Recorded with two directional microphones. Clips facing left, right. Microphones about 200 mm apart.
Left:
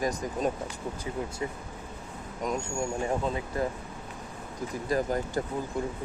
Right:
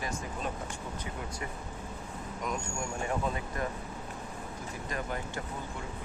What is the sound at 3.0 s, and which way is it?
Speech, 25° left (ahead or behind).